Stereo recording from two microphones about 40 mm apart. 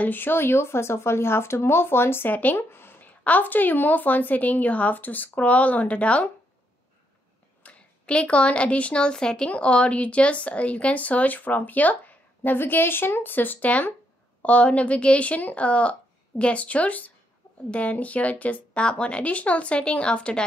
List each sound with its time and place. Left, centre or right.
0.1 s speech: left
2.2 s a woman's voice: left
2.7 s a sound: left
3.3 s a woman's voice: left
7.6 s speech: left
12.5 s a woman's voice: left
14.4 s speech: left